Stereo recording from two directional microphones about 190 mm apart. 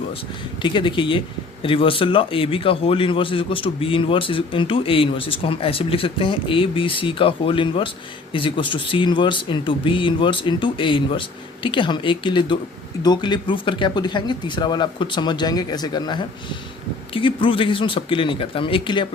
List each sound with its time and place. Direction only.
0.6 s speech: 25° left (ahead or behind)